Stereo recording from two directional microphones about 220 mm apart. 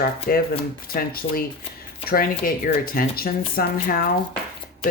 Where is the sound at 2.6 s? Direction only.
40° left (ahead or behind).